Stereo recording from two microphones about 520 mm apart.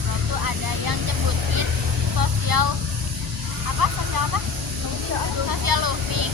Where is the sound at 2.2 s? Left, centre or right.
Right.